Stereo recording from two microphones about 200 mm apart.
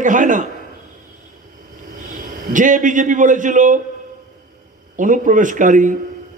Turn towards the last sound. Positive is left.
turn(degrees=-40)  # may be behind; listen again after turning